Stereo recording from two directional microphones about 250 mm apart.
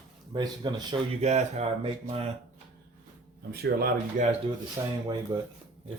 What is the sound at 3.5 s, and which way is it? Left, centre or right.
Speech, right.